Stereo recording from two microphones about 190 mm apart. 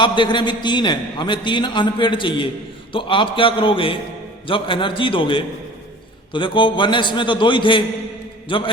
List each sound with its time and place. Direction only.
0.0 s a man's voice: 25° left (ahead or behind)